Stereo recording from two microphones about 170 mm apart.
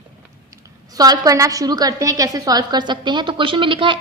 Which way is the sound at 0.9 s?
20° right (ahead or behind).